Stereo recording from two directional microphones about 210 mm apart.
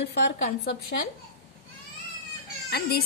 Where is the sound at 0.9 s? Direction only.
40° left (ahead or behind).